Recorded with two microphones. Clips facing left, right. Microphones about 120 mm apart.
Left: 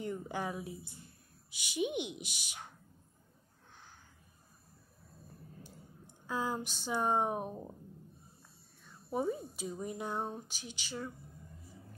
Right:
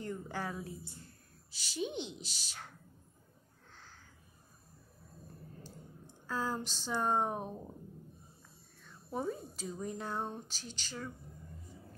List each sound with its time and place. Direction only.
0.0 s a woman's voice: 15° left (ahead or behind)
3.7 s a sound: 15° left (ahead or behind)
5.6 s speech: 15° left (ahead or behind)
8.8 s speech: 10° left (ahead or behind)